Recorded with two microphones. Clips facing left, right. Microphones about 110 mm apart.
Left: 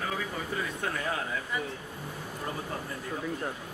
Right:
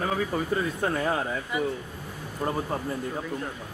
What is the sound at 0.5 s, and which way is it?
Speech, 35° right (ahead or behind).